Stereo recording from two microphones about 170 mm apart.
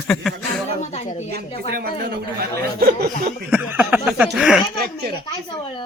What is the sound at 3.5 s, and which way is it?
Speech, 10° right (ahead or behind).